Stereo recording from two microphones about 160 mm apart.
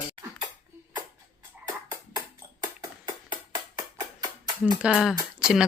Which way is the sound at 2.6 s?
25° right (ahead or behind).